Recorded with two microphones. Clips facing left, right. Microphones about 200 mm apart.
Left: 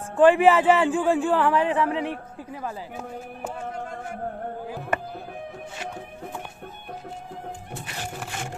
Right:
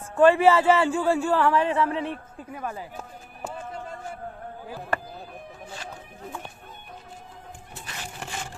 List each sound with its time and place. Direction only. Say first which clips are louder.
0.1 s speech: left 1 dB; 15° left (ahead or behind)